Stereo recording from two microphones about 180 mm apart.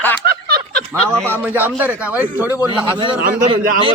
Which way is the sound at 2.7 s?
25° right (ahead or behind).